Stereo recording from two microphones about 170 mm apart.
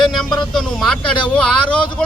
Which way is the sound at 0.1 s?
Centre (ahead or behind).